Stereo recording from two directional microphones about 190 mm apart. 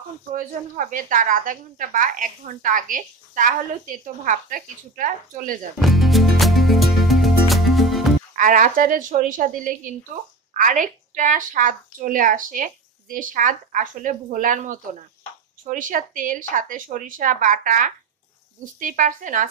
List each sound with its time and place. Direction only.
0.3 s a woman's voice: 45° right (ahead or behind)
5.8 s music: centre (ahead or behind)
8.4 s a woman's voice: 45° right (ahead or behind)